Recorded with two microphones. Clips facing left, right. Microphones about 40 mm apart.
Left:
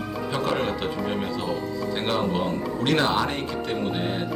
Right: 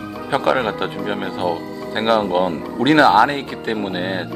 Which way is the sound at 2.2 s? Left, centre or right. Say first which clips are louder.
Right 6 dB; right.